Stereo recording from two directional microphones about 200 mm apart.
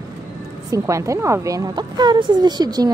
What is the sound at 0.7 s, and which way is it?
A woman's voice, 15° right (ahead or behind).